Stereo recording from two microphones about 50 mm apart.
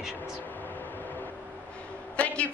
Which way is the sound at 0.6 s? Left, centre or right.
Left.